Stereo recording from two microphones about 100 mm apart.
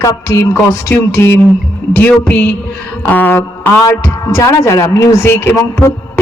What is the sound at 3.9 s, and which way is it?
A man's voice, 35° left (ahead or behind).